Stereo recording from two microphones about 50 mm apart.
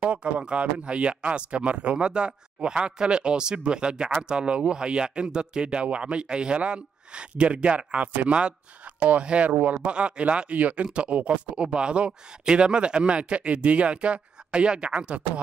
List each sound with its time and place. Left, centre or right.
0.0 s speech: right